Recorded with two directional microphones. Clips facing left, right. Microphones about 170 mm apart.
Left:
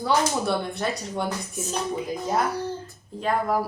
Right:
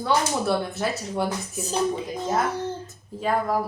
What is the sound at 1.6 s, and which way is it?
Dishes, 30° right (ahead or behind).